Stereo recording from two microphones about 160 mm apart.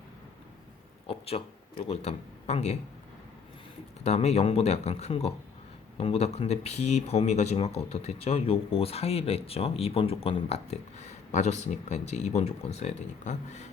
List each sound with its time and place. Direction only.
1.0 s a man's voice: 35° left (ahead or behind)
4.0 s speech: 45° left (ahead or behind)